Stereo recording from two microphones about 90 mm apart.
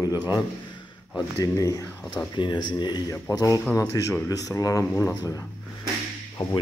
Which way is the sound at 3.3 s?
40° left (ahead or behind).